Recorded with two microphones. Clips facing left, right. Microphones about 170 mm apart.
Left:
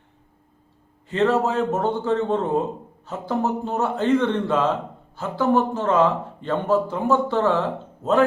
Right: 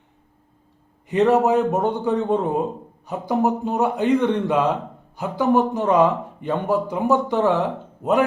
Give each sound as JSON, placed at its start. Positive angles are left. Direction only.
{"t": 1.0, "sound": "speech", "side_deg": -15}